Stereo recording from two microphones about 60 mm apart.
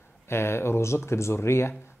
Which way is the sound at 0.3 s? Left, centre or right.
Left.